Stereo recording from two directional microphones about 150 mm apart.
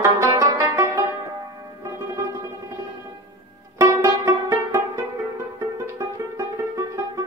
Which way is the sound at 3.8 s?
20° right (ahead or behind).